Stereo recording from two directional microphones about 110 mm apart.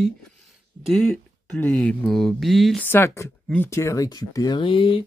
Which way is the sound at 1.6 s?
10° left (ahead or behind).